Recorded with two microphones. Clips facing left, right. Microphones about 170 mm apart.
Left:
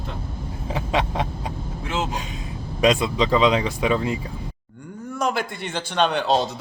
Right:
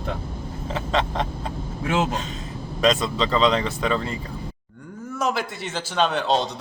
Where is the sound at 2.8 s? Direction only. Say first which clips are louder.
Left 2 dB; 10° left (ahead or behind).